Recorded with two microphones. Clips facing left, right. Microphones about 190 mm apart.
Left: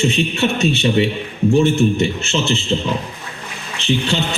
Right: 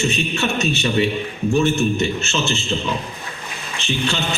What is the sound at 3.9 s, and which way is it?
Speech, 30° left (ahead or behind).